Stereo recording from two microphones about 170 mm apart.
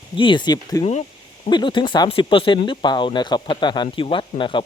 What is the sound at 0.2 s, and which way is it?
Speech, 30° left (ahead or behind).